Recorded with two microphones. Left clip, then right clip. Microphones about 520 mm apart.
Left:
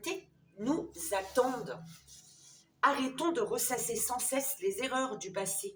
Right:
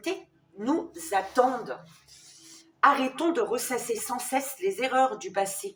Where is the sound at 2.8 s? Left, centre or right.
Left.